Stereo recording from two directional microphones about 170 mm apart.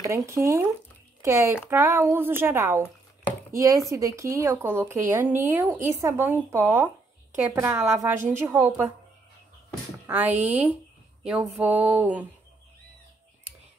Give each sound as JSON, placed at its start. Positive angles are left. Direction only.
{"t": 0.0, "sound": "speech", "side_deg": -20}
{"t": 10.0, "sound": "speech", "side_deg": -10}